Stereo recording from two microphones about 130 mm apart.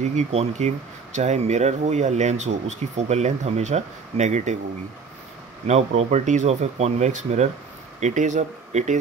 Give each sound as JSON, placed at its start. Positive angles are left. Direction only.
{"t": 0.0, "sound": "speech", "side_deg": -65}
{"t": 5.7, "sound": "speech", "side_deg": -60}